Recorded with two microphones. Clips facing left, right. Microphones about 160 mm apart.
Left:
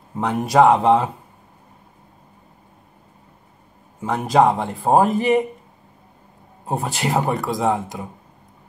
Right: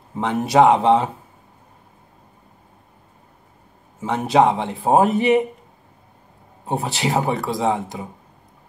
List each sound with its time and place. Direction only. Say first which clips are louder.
0.1 s speech: even; centre (ahead or behind)
4.0 s speech: even; centre (ahead or behind)
6.6 s speech: right 1 dB; centre (ahead or behind)